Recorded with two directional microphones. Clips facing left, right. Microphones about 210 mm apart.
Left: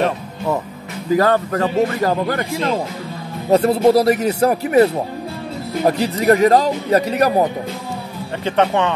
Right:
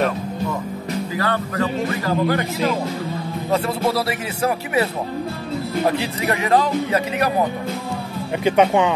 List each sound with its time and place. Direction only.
1.1 s speech: 40° left (ahead or behind)
3.5 s speech: 40° left (ahead or behind)
5.9 s speech: 45° left (ahead or behind)
8.5 s speech: 10° right (ahead or behind)